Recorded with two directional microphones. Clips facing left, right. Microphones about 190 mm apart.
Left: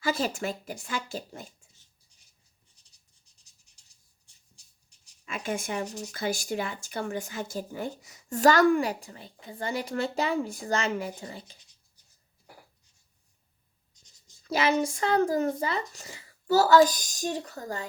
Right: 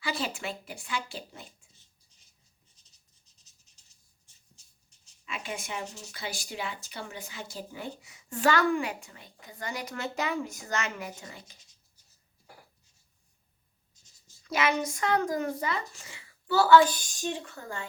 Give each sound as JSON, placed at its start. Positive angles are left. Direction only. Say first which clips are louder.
{"t": 0.0, "sound": "a woman's voice", "louder": "left 5 dB", "side_deg": 45}
{"t": 4.5, "sound": "dog", "louder": "left 2 dB", "side_deg": 15}
{"t": 5.2, "sound": "speech", "louder": "left 6 dB", "side_deg": 45}
{"t": 14.4, "sound": "speech", "louder": "left 3 dB", "side_deg": 30}